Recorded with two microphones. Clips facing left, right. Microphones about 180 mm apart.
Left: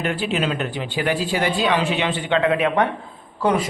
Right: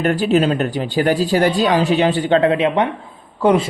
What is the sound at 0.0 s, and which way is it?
Speech, 40° right (ahead or behind).